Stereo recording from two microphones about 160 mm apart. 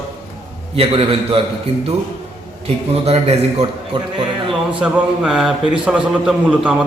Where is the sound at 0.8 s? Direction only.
35° right (ahead or behind).